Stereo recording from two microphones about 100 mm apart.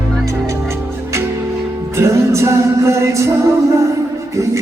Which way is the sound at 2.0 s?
30° right (ahead or behind).